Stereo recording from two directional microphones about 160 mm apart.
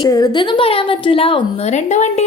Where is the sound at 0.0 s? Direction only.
25° left (ahead or behind).